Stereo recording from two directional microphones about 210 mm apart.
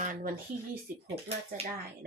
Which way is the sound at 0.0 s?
40° right (ahead or behind).